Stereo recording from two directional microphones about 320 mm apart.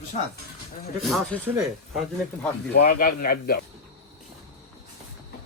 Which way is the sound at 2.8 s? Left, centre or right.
Left.